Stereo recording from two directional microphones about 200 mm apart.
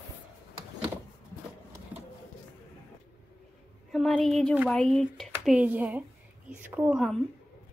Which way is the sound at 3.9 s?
Centre (ahead or behind).